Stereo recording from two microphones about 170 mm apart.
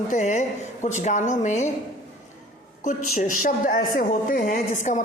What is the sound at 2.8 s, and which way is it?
Speech, 50° left (ahead or behind).